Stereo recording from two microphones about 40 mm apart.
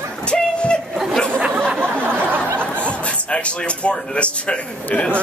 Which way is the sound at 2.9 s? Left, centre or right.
Left.